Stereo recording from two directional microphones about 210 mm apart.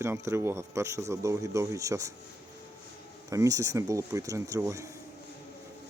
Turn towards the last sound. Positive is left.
turn(degrees=-15)  # may be behind; listen again after turning